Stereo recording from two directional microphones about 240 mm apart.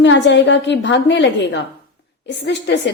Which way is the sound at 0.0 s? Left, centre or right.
Left.